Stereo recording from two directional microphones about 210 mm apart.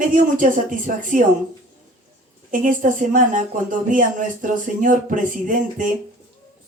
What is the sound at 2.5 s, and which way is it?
A woman's voice, 40° right (ahead or behind).